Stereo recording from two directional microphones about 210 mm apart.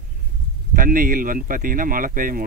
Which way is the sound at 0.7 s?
40° right (ahead or behind).